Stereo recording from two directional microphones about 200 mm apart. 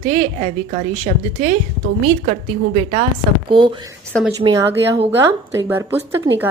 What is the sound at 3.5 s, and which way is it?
Speech, 25° right (ahead or behind).